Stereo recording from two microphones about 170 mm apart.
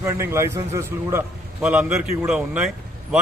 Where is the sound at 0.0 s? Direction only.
15° right (ahead or behind).